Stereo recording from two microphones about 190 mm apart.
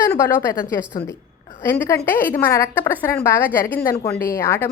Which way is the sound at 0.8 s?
15° left (ahead or behind).